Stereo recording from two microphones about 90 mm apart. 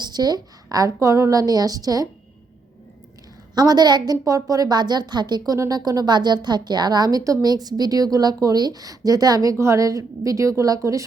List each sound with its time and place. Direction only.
0.0 s a woman's voice: 50° right (ahead or behind)
3.5 s a woman's voice: 50° right (ahead or behind)
5.5 s a woman's voice: 40° right (ahead or behind)